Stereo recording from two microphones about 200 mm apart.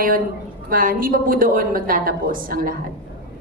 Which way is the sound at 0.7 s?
45° right (ahead or behind).